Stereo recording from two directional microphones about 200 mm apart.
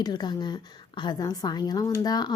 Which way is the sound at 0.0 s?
20° left (ahead or behind).